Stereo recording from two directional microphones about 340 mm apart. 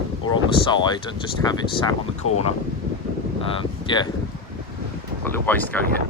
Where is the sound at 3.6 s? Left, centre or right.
Centre.